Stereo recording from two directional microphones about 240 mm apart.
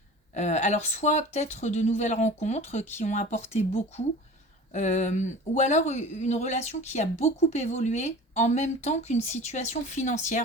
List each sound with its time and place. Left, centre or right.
0.3 s speech: left